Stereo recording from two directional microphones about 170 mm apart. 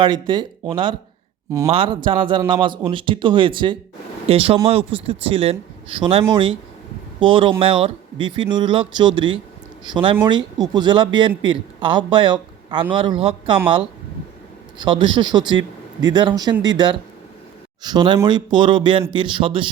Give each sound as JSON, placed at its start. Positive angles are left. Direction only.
{"t": 0.0, "sound": "speech", "side_deg": -25}
{"t": 1.6, "sound": "a man's voice", "side_deg": -30}
{"t": 14.8, "sound": "speech", "side_deg": -30}